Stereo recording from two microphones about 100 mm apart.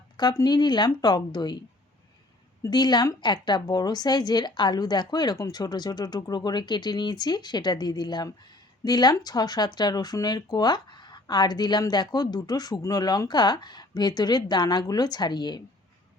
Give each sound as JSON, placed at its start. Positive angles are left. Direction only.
{"t": 0.3, "sound": "speech", "side_deg": 40}
{"t": 2.6, "sound": "speech", "side_deg": 45}